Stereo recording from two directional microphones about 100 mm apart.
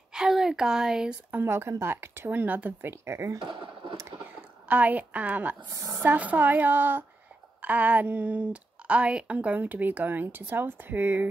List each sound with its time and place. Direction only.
0.1 s speech: 5° right (ahead or behind)
1.3 s speech: 25° right (ahead or behind)
3.3 s a sound: 55° right (ahead or behind)
4.2 s speech: 15° right (ahead or behind)
5.7 s speech: 35° right (ahead or behind)
6.0 s a woman's voice: 15° right (ahead or behind)